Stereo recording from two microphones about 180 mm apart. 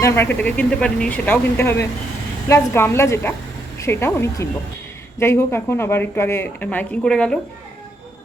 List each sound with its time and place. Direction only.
0.0 s speech: 10° left (ahead or behind)